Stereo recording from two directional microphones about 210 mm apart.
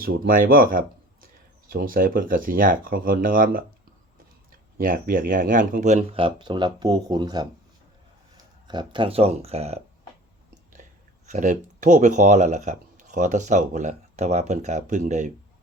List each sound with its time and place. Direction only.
0.0 s speech: 45° right (ahead or behind)
4.8 s speech: 40° right (ahead or behind); by 7.4 s 20° right (ahead or behind)
8.6 s speech: 20° right (ahead or behind)
10.8 s a sound: 35° right (ahead or behind)
11.3 s speech: 35° right (ahead or behind)